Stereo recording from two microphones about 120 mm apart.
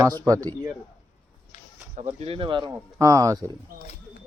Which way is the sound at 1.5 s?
75° left (ahead or behind).